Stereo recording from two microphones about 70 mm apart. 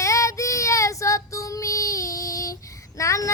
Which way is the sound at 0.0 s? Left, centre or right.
Left.